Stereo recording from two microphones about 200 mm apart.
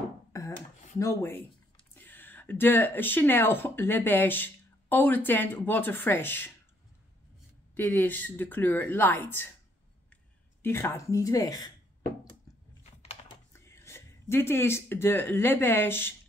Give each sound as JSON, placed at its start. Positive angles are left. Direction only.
{"t": 0.3, "sound": "a sound", "side_deg": 15}
{"t": 0.9, "sound": "speech", "side_deg": 15}
{"t": 7.7, "sound": "speech", "side_deg": 10}
{"t": 10.6, "sound": "speech", "side_deg": 10}
{"t": 13.5, "sound": "speech", "side_deg": 15}